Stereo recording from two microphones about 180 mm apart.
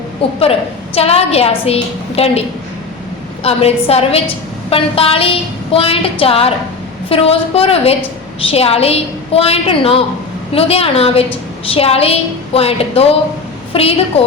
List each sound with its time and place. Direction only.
0.2 s a woman's voice: 30° left (ahead or behind)
3.4 s a woman's voice: 35° left (ahead or behind)